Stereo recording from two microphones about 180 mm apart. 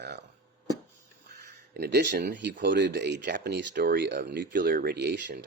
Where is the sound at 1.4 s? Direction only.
60° right (ahead or behind).